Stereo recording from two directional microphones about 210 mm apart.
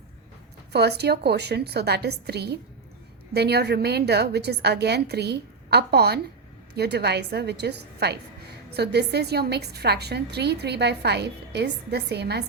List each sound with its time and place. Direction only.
0.7 s a woman's voice: 50° right (ahead or behind)